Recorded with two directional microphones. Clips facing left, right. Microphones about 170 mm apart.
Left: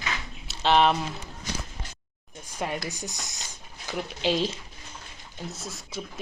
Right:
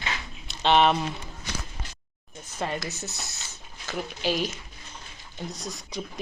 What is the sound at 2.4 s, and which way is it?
Speech, 10° left (ahead or behind).